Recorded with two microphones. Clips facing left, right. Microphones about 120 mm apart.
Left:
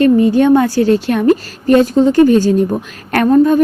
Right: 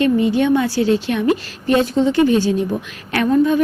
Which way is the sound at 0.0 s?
45° left (ahead or behind).